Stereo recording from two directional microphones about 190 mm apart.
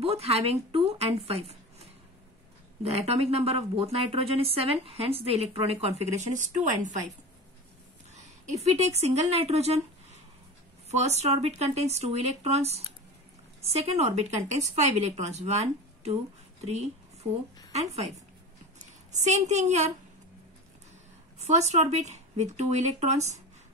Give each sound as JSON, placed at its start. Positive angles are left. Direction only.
{"t": 0.0, "sound": "a woman's voice", "side_deg": -30}
{"t": 8.2, "sound": "speech", "side_deg": -35}
{"t": 10.9, "sound": "a woman's voice", "side_deg": -35}
{"t": 19.1, "sound": "a woman's voice", "side_deg": -40}
{"t": 21.5, "sound": "a woman's voice", "side_deg": -35}